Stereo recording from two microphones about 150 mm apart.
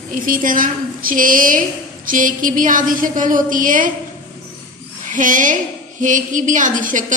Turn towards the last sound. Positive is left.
turn(degrees=-60)  # may be behind; listen again after turning